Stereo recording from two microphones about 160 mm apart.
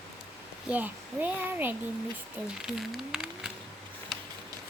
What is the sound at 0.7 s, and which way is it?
A child's voice, 10° right (ahead or behind).